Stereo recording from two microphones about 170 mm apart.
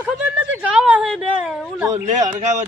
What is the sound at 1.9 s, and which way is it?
Speech, 45° right (ahead or behind).